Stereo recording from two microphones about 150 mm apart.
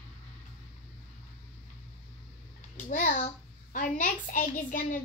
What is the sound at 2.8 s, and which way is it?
A child's voice, 60° left (ahead or behind).